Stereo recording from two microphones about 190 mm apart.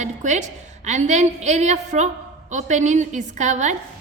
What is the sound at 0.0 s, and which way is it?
A woman's voice, 40° right (ahead or behind).